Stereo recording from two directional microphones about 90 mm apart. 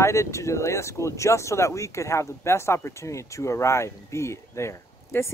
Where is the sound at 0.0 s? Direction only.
35° left (ahead or behind).